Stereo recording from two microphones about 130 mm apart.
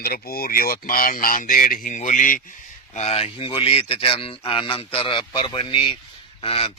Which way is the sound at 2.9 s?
55° left (ahead or behind).